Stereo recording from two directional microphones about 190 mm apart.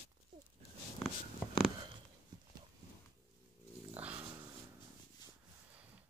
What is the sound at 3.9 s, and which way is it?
Dog, 10° right (ahead or behind).